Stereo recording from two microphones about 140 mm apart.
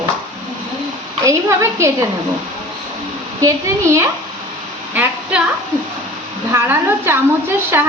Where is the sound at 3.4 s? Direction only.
20° right (ahead or behind).